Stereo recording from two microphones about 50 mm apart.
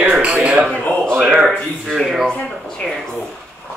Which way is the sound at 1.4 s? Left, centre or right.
Centre.